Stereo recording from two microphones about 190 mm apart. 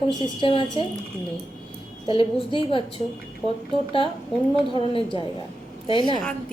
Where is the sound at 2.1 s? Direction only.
25° left (ahead or behind).